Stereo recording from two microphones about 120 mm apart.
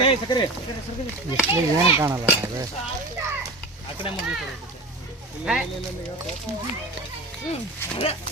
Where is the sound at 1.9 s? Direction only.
25° right (ahead or behind).